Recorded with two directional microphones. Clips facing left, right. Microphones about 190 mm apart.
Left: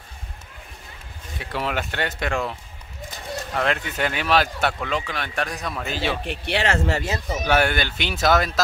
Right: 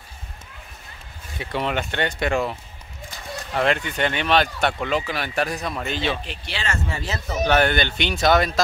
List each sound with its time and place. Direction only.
1.4 s speech: centre (ahead or behind)
3.5 s speech: centre (ahead or behind)
6.2 s speech: 60° left (ahead or behind)
7.1 s speech: 10° left (ahead or behind)